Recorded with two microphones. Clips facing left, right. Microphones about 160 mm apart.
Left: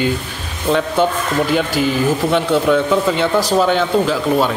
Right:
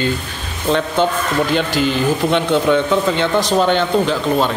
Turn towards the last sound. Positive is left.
turn(degrees=5)  # may be behind; listen again after turning